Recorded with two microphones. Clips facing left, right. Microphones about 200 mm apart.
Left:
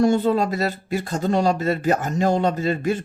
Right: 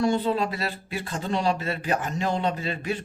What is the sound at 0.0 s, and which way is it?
Speech, 45° left (ahead or behind).